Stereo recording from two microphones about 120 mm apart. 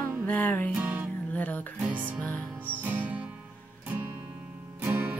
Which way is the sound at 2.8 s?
15° right (ahead or behind).